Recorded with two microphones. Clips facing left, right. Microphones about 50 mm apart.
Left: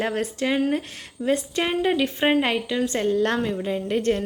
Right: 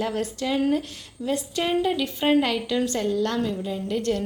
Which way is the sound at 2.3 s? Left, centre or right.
Left.